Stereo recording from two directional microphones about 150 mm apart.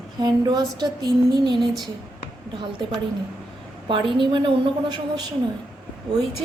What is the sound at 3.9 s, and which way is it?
A woman's voice, 35° right (ahead or behind).